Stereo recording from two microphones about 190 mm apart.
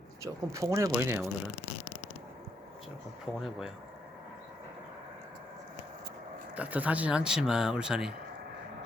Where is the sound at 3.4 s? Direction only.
Centre (ahead or behind).